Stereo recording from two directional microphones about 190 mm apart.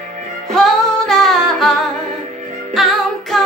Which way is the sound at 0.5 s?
Centre (ahead or behind).